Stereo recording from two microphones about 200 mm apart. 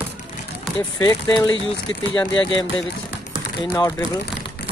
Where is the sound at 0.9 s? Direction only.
20° left (ahead or behind).